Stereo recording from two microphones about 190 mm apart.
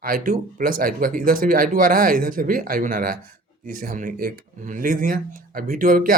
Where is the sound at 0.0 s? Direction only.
45° right (ahead or behind).